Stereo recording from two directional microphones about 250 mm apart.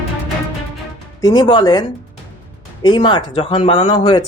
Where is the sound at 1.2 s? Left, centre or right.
Centre.